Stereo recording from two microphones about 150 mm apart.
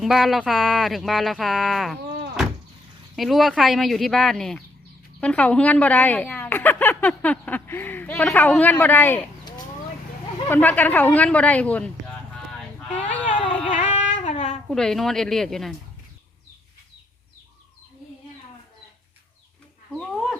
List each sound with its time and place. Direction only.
0.0 s speech: centre (ahead or behind)
3.2 s a woman's voice: centre (ahead or behind)
10.5 s a woman's voice: 10° left (ahead or behind)
13.0 s a woman's voice: 10° left (ahead or behind)
13.7 s child singing: 55° left (ahead or behind)
14.7 s speech: centre (ahead or behind)